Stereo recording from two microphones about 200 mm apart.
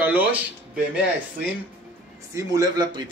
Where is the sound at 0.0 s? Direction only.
10° right (ahead or behind).